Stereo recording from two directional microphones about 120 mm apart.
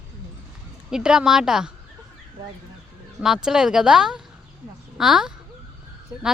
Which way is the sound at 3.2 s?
5° right (ahead or behind).